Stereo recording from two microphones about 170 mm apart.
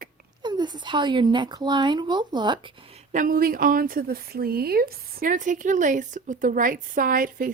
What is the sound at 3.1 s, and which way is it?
Speech, 55° right (ahead or behind).